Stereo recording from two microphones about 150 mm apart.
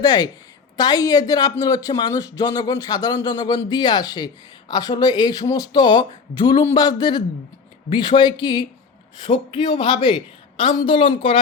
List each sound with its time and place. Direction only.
0.0 s a woman's voice: 25° left (ahead or behind)